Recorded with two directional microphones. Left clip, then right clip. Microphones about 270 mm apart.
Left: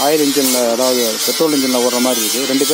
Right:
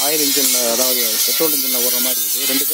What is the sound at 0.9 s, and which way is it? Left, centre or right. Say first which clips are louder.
Speech: left 3 dB; right.